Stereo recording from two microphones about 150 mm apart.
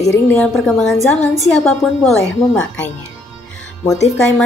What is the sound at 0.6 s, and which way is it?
A woman's voice, 5° left (ahead or behind).